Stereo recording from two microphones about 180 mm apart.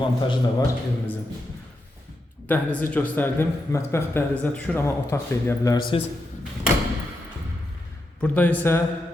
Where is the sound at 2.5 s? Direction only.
10° left (ahead or behind).